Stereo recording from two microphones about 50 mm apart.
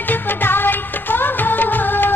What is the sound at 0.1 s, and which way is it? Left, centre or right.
Music of bollywood, left.